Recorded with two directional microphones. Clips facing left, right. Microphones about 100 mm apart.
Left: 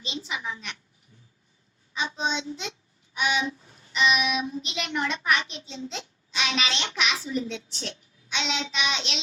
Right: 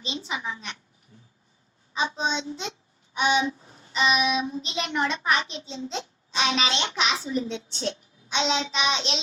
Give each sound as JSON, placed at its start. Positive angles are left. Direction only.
{"t": 0.0, "sound": "a sound", "side_deg": -35}
{"t": 1.9, "sound": "a child's voice", "side_deg": -30}
{"t": 3.2, "sound": "child singing", "side_deg": -30}